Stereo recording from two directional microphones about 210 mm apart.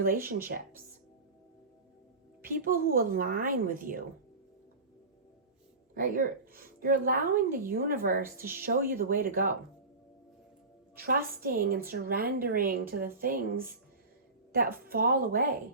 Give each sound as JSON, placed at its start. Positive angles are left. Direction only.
{"t": 0.0, "sound": "a woman's voice", "side_deg": -40}
{"t": 2.4, "sound": "a woman's voice", "side_deg": -45}
{"t": 5.9, "sound": "a woman's voice", "side_deg": -40}
{"t": 11.0, "sound": "a woman's voice", "side_deg": -45}
{"t": 14.8, "sound": "a woman's voice", "side_deg": -45}